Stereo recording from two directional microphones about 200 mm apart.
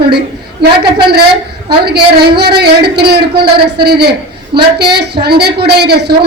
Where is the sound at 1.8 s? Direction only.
50° right (ahead or behind).